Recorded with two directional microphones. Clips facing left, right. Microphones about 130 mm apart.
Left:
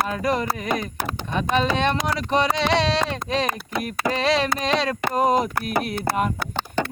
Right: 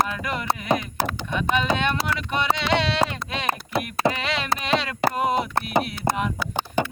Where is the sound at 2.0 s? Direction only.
35° left (ahead or behind).